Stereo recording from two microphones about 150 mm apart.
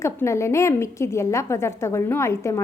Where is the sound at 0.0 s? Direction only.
20° left (ahead or behind).